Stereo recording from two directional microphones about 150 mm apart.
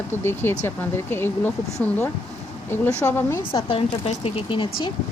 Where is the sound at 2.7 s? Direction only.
15° left (ahead or behind).